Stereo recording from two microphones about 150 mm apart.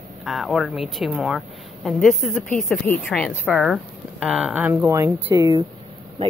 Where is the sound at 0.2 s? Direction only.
Centre (ahead or behind).